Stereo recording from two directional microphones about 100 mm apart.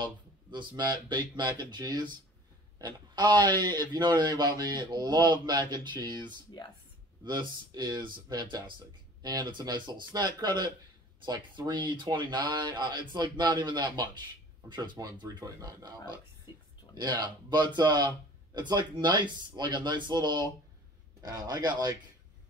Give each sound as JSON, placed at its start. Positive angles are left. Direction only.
{"t": 0.0, "sound": "speech", "side_deg": -50}
{"t": 7.2, "sound": "speech", "side_deg": -45}
{"t": 16.9, "sound": "speech", "side_deg": -45}